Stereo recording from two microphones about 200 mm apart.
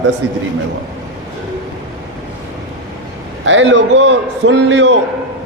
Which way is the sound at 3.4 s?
70° right (ahead or behind).